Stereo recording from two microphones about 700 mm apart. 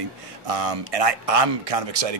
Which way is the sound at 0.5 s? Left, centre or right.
Right.